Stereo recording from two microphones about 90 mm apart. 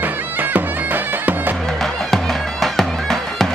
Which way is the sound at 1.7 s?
5° left (ahead or behind).